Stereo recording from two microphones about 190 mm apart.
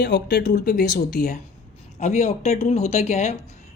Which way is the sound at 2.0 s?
35° left (ahead or behind).